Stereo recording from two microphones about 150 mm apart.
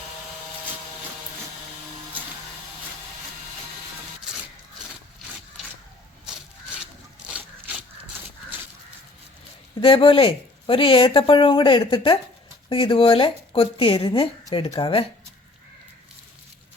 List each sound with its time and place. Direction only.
6.2 s rub: 5° right (ahead or behind)
9.8 s speech: 35° left (ahead or behind)